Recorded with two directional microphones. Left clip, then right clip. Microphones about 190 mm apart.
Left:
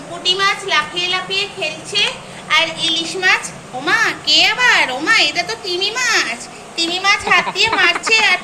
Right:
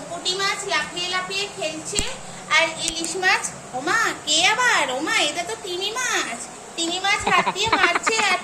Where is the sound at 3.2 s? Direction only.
10° right (ahead or behind).